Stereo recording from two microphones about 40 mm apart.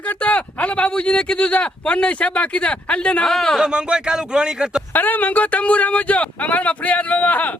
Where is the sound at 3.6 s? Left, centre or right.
Right.